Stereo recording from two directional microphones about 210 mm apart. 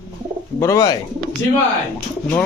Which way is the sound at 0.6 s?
15° left (ahead or behind).